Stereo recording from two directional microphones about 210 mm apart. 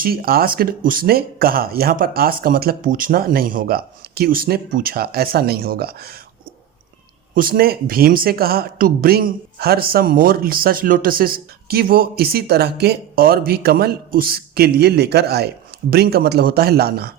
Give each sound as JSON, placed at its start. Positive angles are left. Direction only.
{"t": 0.0, "sound": "speech", "side_deg": -45}
{"t": 7.3, "sound": "speech", "side_deg": -45}